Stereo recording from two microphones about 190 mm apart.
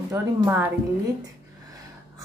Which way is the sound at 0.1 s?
10° right (ahead or behind).